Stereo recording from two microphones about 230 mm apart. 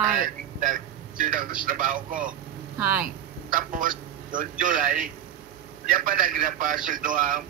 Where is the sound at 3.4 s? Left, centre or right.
Right.